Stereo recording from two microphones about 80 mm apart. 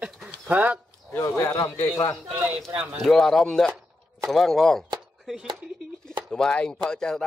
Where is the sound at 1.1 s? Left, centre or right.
Left.